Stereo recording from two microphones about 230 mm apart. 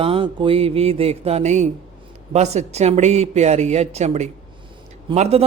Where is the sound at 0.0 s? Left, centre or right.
Right.